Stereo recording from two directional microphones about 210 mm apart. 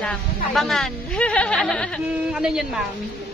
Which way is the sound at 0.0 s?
5° left (ahead or behind).